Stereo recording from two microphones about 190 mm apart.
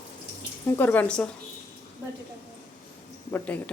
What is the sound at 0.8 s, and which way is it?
Speech, 10° left (ahead or behind).